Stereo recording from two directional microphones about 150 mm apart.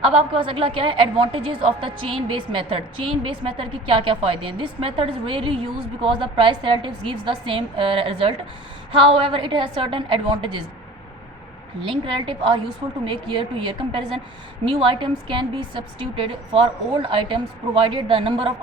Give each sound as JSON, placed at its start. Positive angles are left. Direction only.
{"t": 0.0, "sound": "a woman's voice", "side_deg": -35}
{"t": 9.3, "sound": "a woman's voice", "side_deg": -35}
{"t": 11.8, "sound": "a woman's voice", "side_deg": -30}